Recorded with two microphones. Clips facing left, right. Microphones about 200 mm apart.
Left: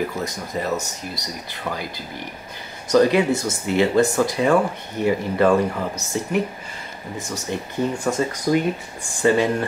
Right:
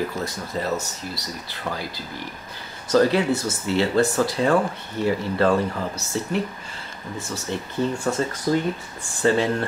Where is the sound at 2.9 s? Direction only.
15° left (ahead or behind).